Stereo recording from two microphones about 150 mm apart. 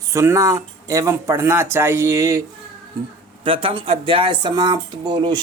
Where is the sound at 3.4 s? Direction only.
35° right (ahead or behind).